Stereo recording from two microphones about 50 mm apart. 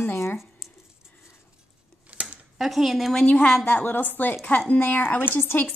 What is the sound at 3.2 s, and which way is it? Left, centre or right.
A woman's voice, left.